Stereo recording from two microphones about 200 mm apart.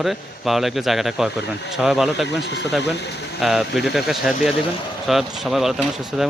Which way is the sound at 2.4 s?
60° left (ahead or behind).